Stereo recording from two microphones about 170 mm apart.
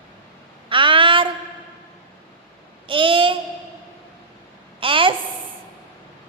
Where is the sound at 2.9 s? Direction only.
30° right (ahead or behind).